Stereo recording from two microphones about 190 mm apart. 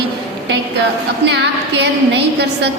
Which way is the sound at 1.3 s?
65° right (ahead or behind).